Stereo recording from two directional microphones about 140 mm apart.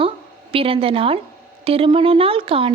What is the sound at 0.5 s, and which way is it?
A child's voice, 40° right (ahead or behind).